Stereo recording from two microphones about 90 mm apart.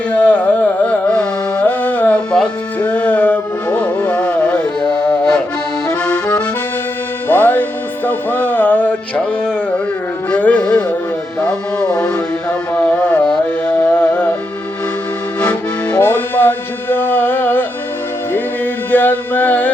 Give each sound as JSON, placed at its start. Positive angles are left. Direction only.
{"t": 0.1, "sound": "carnatic music", "side_deg": 15}
{"t": 2.7, "sound": "music", "side_deg": 15}
{"t": 5.9, "sound": "accordion", "side_deg": 15}
{"t": 7.3, "sound": "music", "side_deg": 20}
{"t": 15.4, "sound": "accordion", "side_deg": 15}
{"t": 18.3, "sound": "music", "side_deg": 20}